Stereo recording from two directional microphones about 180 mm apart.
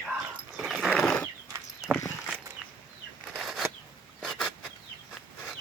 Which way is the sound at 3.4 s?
Centre (ahead or behind).